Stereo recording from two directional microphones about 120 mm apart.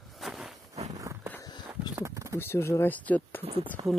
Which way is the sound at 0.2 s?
5° right (ahead or behind).